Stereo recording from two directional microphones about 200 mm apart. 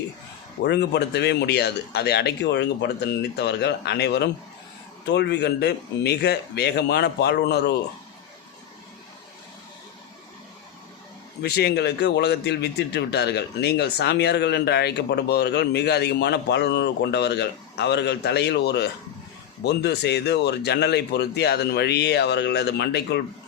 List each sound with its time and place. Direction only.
0.6 s a man's voice: 55° left (ahead or behind)
11.4 s a man's voice: 55° left (ahead or behind)